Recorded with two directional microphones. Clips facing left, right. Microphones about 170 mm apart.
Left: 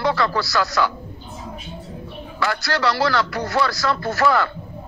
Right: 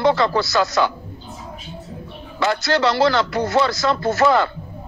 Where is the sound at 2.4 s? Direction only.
20° right (ahead or behind).